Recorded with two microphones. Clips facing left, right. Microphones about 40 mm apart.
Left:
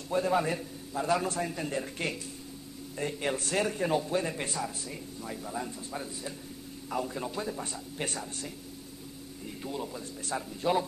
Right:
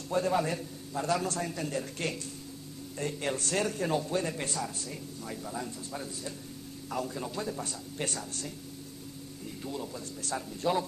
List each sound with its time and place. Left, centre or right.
0.1 s a man's voice: centre
9.7 s a man's voice: centre